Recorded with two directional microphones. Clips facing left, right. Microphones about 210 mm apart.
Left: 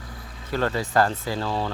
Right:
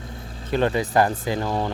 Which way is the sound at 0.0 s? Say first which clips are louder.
Right 4 dB; 25° right (ahead or behind).